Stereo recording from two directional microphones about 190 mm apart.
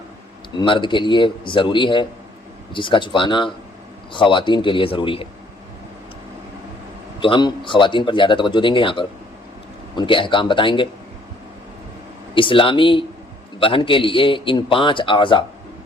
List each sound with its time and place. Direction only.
0.5 s speech: 25° left (ahead or behind)
7.2 s speech: 25° left (ahead or behind)
12.3 s speech: 25° left (ahead or behind)